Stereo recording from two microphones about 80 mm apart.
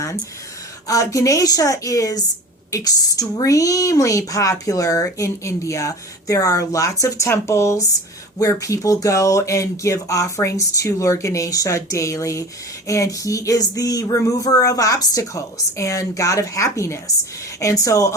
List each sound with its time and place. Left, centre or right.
0.9 s a woman's voice: left